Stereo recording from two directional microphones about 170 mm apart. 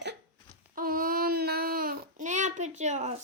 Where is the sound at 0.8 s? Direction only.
55° right (ahead or behind).